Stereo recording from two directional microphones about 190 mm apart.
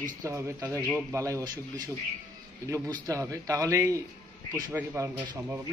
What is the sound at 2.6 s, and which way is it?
A man's voice, 15° right (ahead or behind).